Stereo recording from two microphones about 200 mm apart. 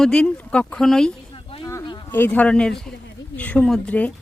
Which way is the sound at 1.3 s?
25° left (ahead or behind).